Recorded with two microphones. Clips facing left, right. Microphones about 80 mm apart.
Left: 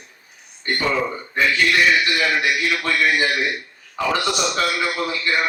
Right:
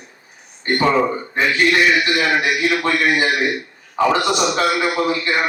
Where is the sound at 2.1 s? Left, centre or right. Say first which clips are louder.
Right 3 dB; right.